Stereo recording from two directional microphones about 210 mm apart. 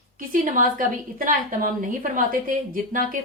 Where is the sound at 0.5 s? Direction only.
40° right (ahead or behind).